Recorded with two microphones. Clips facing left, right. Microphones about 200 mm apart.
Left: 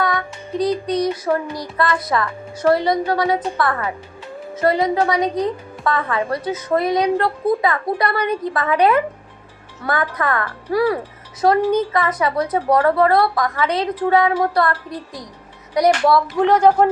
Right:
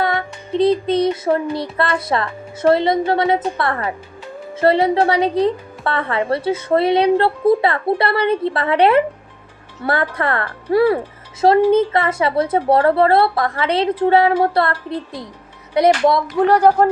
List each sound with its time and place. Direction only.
0.0 s a woman's voice: 25° right (ahead or behind); by 16.7 s 10° right (ahead or behind)